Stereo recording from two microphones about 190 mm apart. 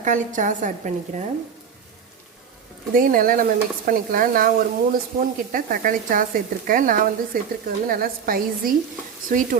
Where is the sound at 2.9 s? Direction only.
45° right (ahead or behind).